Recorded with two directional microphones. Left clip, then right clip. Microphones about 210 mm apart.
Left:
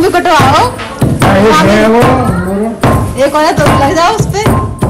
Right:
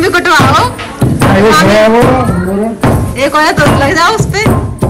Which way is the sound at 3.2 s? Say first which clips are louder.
Even; 15° left (ahead or behind).